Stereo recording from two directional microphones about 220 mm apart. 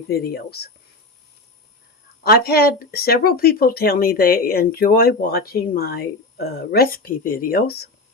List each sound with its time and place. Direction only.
0.1 s speech: 45° left (ahead or behind)
2.2 s speech: 45° left (ahead or behind)